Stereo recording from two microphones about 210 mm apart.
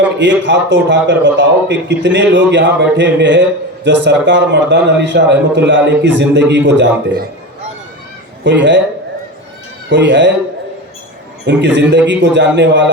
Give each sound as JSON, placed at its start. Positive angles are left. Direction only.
{"t": 0.2, "sound": "a man's voice", "side_deg": -60}
{"t": 8.4, "sound": "a man's voice", "side_deg": -60}
{"t": 9.9, "sound": "a man's voice", "side_deg": -60}
{"t": 11.4, "sound": "a man's voice", "side_deg": -55}